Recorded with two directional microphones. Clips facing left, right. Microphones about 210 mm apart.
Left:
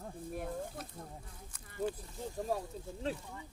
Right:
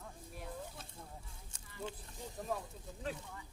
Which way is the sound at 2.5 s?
30° left (ahead or behind).